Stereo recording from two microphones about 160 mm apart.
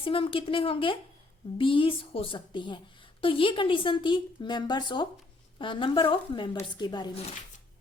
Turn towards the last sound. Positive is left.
turn(degrees=25)  # may be behind; listen again after turning